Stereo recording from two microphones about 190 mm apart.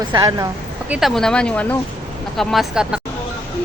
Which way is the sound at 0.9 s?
Centre (ahead or behind).